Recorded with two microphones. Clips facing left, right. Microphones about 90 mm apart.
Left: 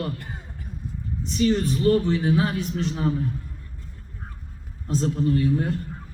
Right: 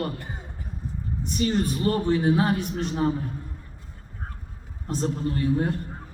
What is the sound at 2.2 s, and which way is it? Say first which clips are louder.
Speech: right 1 dB; 30° right (ahead or behind).